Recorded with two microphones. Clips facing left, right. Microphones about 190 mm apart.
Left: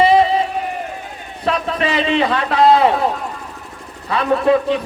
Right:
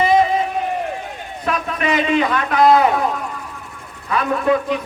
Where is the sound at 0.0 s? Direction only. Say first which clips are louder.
Left 2 dB; 30° left (ahead or behind).